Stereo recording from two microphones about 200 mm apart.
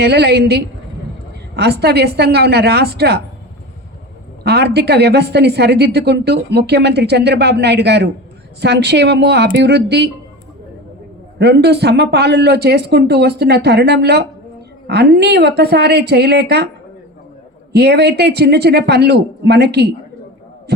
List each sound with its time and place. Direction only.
0.0 s a woman's voice: 55° right (ahead or behind)
4.4 s a woman's voice: 55° right (ahead or behind)
11.3 s a woman's voice: 55° right (ahead or behind)
17.7 s a woman's voice: 55° right (ahead or behind)
20.7 s a sound: 55° right (ahead or behind)